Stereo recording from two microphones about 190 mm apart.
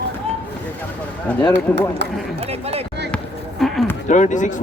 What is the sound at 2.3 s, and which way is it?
Speech, 30° right (ahead or behind).